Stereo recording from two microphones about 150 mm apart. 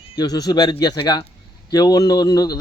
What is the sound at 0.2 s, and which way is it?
A man's voice, 25° left (ahead or behind).